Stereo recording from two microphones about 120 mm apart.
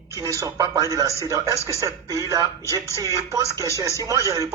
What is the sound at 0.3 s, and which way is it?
A man's voice, 30° right (ahead or behind).